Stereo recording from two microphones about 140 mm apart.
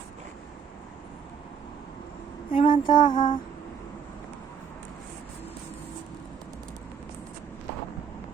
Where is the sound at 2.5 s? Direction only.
35° left (ahead or behind).